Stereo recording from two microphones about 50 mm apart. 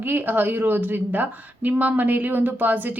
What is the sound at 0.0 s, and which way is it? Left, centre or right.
Speech, right.